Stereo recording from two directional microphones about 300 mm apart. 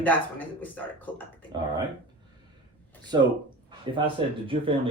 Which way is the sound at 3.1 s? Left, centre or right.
Centre.